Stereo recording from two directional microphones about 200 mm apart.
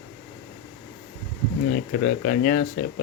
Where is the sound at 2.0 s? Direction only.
45° left (ahead or behind).